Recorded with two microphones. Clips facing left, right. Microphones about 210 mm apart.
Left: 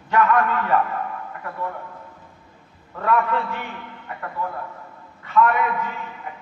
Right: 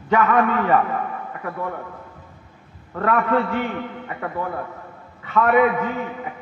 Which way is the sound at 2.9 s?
60° right (ahead or behind).